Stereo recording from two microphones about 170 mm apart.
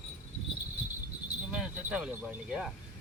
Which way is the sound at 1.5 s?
5° right (ahead or behind).